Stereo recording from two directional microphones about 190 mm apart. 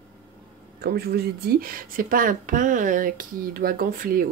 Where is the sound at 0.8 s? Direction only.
55° right (ahead or behind).